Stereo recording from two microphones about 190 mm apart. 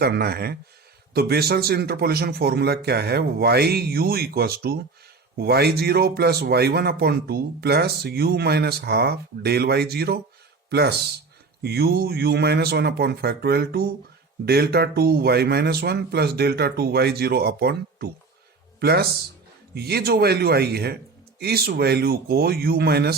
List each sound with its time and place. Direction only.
0.0 s speech: 55° right (ahead or behind)